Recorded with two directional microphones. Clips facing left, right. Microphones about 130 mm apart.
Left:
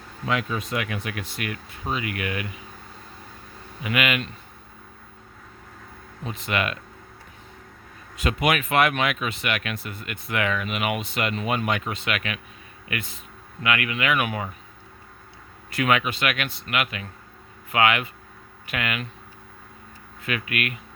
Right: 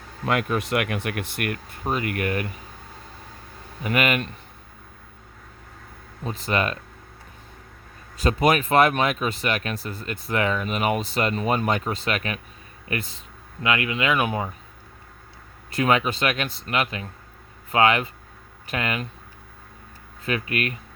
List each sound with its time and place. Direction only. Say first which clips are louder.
0.3 s speech: right 3 dB; 55° right (ahead or behind)
3.8 s speech: right 2 dB; 40° right (ahead or behind)
6.2 s speech: right 2 dB; 35° right (ahead or behind)
8.1 s speech: right 3 dB; 35° right (ahead or behind)
15.7 s speech: right 2 dB; 30° right (ahead or behind)
20.2 s speech: right 2 dB; 35° right (ahead or behind)